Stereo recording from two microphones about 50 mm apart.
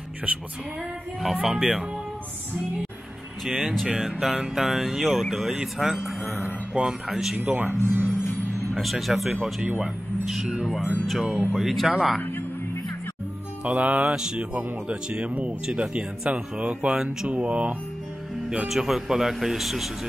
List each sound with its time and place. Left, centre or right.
1.2 s speech: centre
3.4 s a man's voice: centre
6.4 s a sound: centre
7.1 s speech: centre
7.3 s speech: right
7.8 s speech: right
8.7 s speech: centre
11.5 s speech: centre
12.2 s music: left
13.7 s speech: right
14.1 s speech: centre
14.5 s speech: right
18.7 s speech: centre